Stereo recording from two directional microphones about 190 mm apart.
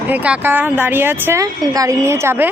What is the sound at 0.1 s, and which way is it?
Speech, 5° right (ahead or behind).